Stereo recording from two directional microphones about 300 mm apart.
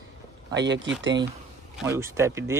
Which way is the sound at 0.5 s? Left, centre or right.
Right.